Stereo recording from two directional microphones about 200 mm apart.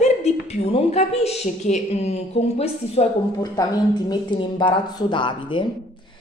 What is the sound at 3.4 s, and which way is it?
Speech, 20° left (ahead or behind).